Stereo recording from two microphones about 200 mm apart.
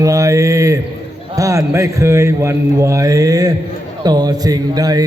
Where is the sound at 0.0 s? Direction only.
15° right (ahead or behind).